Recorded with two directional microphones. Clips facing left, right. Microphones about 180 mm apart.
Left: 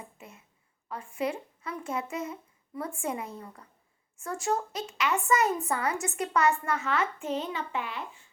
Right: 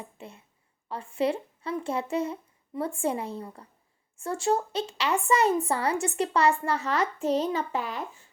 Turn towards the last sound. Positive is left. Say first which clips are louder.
# right 4 dB
turn(degrees=-40)  # may be behind; listen again after turning